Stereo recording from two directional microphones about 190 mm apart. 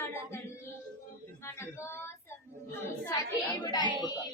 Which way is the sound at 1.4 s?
15° left (ahead or behind).